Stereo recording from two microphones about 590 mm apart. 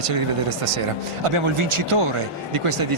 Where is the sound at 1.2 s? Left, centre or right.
Right.